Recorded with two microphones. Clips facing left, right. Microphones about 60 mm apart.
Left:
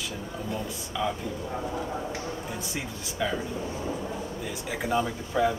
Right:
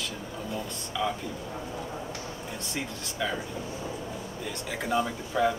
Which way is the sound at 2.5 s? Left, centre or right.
Centre.